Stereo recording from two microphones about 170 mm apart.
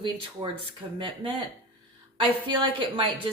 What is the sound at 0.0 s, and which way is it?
Speech, 30° right (ahead or behind).